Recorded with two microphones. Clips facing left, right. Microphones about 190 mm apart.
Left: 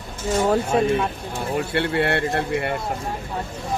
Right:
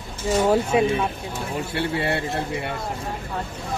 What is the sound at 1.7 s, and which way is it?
A man's voice, 60° left (ahead or behind).